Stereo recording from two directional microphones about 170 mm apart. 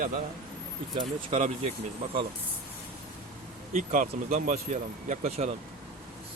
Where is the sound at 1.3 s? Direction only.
40° right (ahead or behind).